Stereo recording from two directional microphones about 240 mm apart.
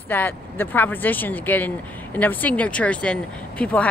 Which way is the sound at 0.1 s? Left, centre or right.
Centre.